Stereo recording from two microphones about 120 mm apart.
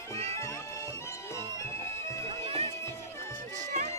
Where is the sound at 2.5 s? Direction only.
50° right (ahead or behind).